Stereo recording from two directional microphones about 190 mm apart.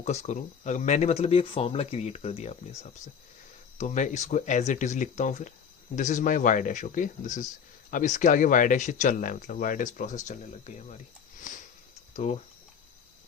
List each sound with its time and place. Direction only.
0.0 s speech: 35° left (ahead or behind)
11.5 s sniff: 40° left (ahead or behind)
12.1 s speech: 35° left (ahead or behind)